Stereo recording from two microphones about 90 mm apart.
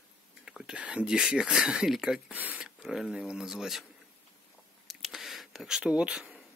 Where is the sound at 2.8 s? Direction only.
5° right (ahead or behind).